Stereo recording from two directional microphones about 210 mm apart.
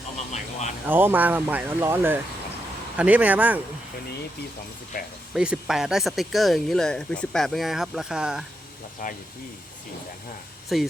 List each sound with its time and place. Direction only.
0.2 s a sound: 35° left (ahead or behind)
0.9 s speech: 10° right (ahead or behind)
5.3 s speech: 5° right (ahead or behind)
9.0 s speech: 40° left (ahead or behind)
10.7 s speech: centre (ahead or behind)